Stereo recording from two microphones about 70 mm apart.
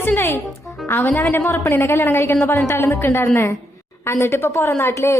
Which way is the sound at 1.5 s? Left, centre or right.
Left.